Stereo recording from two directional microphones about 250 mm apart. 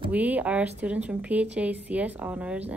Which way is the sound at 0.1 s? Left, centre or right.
Centre.